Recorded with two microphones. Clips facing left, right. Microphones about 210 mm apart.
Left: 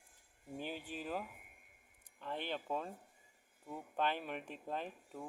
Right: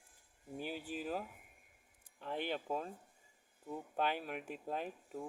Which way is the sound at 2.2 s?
10° right (ahead or behind).